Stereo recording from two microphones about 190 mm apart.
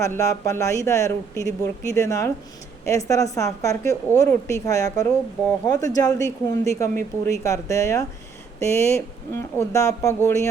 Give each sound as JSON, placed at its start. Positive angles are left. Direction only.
{"t": 0.0, "sound": "speech", "side_deg": 15}